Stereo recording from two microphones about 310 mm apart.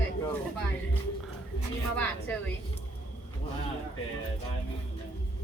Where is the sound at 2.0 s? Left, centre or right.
Centre.